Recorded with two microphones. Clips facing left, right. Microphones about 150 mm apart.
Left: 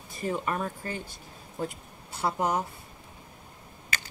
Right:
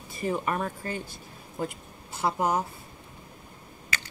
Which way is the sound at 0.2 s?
10° right (ahead or behind).